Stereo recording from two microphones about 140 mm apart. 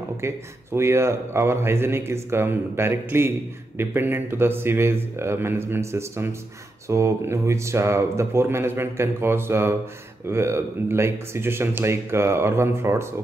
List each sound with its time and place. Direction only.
0.2 s a man's voice: 20° right (ahead or behind)